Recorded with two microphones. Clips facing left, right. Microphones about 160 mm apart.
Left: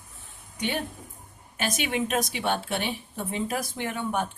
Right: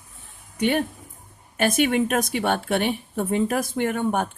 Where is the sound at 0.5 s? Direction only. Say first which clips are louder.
Right 8 dB; 55° right (ahead or behind).